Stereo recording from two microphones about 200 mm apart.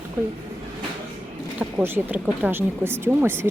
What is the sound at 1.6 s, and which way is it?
Speech, 10° right (ahead or behind).